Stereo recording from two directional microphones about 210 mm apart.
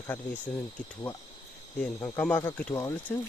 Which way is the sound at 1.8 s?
10° left (ahead or behind).